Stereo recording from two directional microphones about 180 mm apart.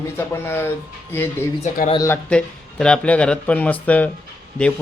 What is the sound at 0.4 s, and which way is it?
Mantra, 15° left (ahead or behind).